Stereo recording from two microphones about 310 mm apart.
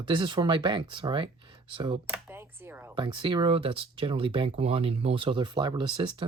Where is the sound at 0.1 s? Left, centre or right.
Centre.